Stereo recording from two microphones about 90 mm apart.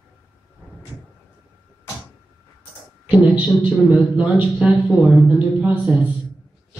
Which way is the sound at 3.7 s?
15° right (ahead or behind).